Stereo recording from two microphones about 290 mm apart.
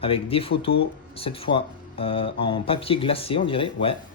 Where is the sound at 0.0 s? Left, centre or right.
Centre.